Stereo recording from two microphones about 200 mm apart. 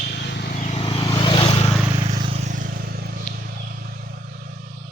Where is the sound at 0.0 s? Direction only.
55° left (ahead or behind).